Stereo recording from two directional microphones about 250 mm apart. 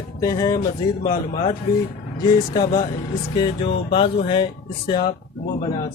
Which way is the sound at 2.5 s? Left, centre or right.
Centre.